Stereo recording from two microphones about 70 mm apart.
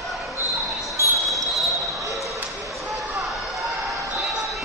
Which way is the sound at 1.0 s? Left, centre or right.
Right.